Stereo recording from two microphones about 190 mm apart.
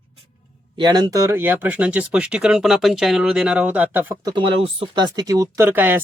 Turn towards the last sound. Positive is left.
turn(degrees=-10)  # may be behind; listen again after turning